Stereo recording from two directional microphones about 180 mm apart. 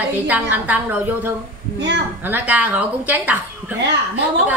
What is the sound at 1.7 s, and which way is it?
Speech, 75° right (ahead or behind).